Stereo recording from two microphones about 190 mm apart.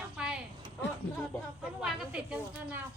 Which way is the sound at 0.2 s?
5° right (ahead or behind).